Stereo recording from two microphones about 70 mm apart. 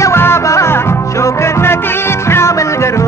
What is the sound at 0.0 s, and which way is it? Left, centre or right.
Music, left.